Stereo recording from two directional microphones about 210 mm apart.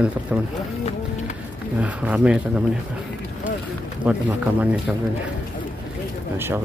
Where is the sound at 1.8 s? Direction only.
5° right (ahead or behind).